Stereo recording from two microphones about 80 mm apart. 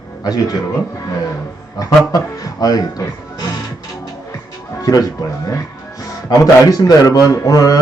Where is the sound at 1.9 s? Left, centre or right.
Left.